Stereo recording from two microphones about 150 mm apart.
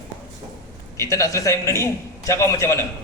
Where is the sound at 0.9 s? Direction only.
20° left (ahead or behind).